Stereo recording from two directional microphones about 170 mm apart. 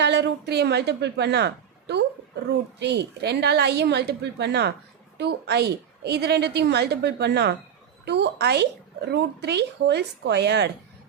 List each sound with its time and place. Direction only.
0.0 s speech: 90° right